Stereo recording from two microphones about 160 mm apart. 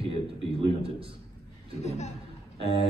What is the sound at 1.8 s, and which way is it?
Speech, 40° left (ahead or behind).